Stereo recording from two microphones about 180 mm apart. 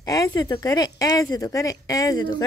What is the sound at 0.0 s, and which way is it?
Speech, 20° left (ahead or behind).